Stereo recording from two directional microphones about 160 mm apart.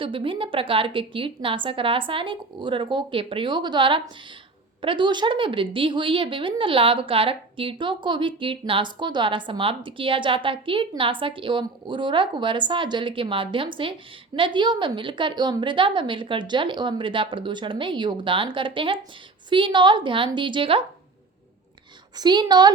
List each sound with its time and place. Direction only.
0.0 s a woman's voice: 35° right (ahead or behind)
22.1 s a woman's voice: 25° right (ahead or behind)